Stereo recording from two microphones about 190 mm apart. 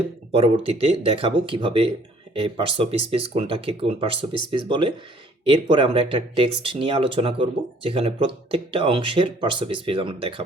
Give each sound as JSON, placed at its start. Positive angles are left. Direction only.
{"t": 0.3, "sound": "speech", "side_deg": -30}